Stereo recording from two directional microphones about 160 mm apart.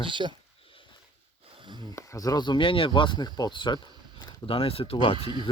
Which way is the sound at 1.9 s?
20° left (ahead or behind).